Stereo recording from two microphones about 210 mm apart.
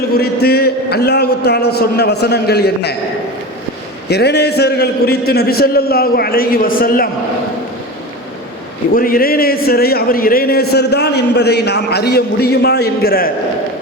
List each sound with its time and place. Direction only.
0.4 s a man's voice: 50° left (ahead or behind)
4.1 s a man's voice: 50° left (ahead or behind)
9.0 s a man's voice: 45° left (ahead or behind)